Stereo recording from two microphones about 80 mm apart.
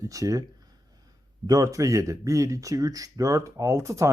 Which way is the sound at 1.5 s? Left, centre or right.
Right.